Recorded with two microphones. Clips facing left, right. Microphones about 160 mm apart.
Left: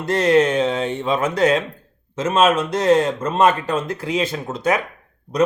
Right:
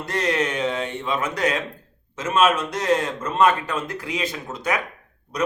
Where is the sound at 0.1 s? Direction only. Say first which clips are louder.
Left 8 dB; 30° left (ahead or behind).